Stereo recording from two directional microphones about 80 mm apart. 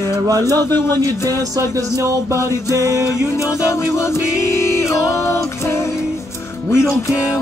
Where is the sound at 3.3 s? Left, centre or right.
Left.